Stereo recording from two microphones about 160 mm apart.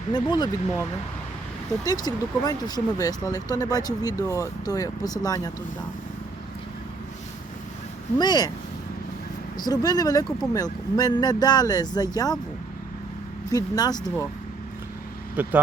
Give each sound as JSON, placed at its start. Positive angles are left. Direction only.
{"t": 0.1, "sound": "speech", "side_deg": 30}
{"t": 1.8, "sound": "speech", "side_deg": 25}
{"t": 8.2, "sound": "speech", "side_deg": 25}
{"t": 9.6, "sound": "speech", "side_deg": 25}
{"t": 13.5, "sound": "speech", "side_deg": 25}
{"t": 15.4, "sound": "speech", "side_deg": -10}